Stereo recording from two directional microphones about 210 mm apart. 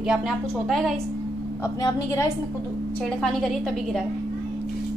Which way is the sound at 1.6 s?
15° left (ahead or behind).